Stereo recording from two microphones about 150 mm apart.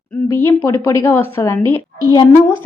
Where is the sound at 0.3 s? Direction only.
15° left (ahead or behind).